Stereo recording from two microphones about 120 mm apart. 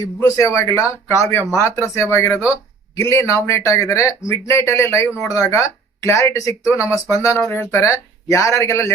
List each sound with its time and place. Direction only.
0.2 s speech: 25° left (ahead or behind)